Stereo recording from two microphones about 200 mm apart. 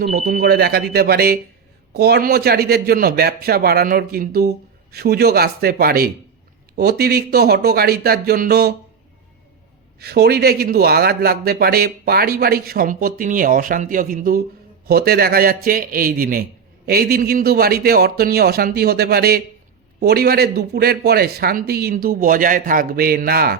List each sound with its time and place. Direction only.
0.0 s a man's voice: 50° right (ahead or behind)
10.0 s a man's voice: 55° right (ahead or behind)